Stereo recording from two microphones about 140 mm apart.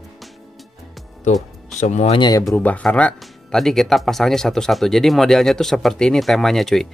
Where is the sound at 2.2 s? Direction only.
25° left (ahead or behind).